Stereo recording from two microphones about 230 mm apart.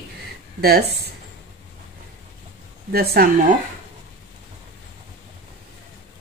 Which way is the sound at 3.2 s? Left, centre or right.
Right.